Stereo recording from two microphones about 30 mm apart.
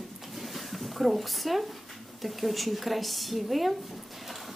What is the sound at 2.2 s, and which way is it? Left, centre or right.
A woman's voice, centre.